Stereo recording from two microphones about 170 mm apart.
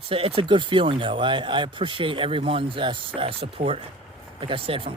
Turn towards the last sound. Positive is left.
turn(degrees=-35)  # may be behind; listen again after turning